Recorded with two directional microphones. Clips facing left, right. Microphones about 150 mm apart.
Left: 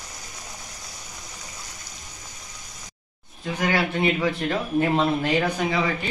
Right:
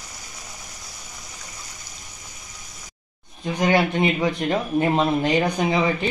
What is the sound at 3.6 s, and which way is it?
Speech, 15° right (ahead or behind).